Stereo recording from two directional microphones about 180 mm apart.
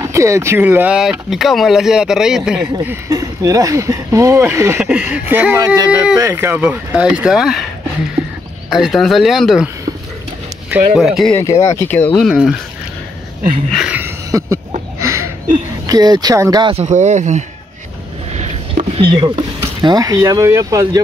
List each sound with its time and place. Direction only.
0.0 s speech: 15° right (ahead or behind)
8.6 s speech: centre (ahead or behind)
10.7 s speech: 5° right (ahead or behind)
13.7 s a sound: centre (ahead or behind)
15.9 s speech: 20° right (ahead or behind)
16.7 s speech: 40° right (ahead or behind)
18.3 s a sound: 40° right (ahead or behind)
19.1 s speech: 25° right (ahead or behind)